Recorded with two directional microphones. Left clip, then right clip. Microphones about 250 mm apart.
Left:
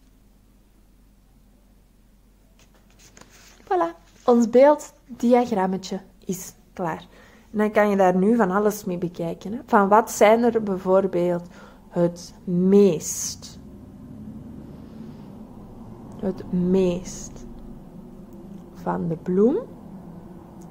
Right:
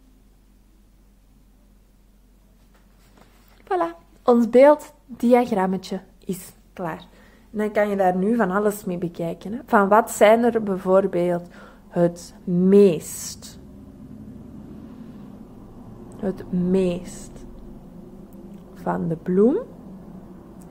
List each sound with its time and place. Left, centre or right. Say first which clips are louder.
3.6 s speech: left 1 dB; centre
16.2 s speech: even; centre
18.8 s speech: right 1 dB; centre